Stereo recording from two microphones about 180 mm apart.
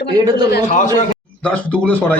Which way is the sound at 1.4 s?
5° left (ahead or behind).